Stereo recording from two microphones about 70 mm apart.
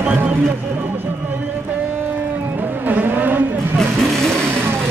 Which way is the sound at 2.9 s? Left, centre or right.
Right.